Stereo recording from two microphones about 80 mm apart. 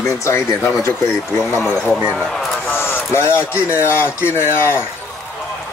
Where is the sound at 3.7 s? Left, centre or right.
Left.